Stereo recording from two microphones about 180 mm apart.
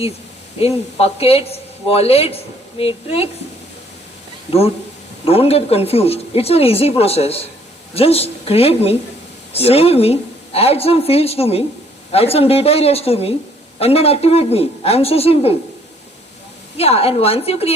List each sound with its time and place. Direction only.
0.6 s speech: 35° left (ahead or behind)
5.2 s speech: 35° left (ahead or behind)
16.7 s speech: 35° left (ahead or behind)